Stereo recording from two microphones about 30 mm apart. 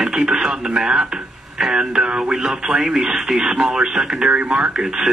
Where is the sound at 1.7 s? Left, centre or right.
Right.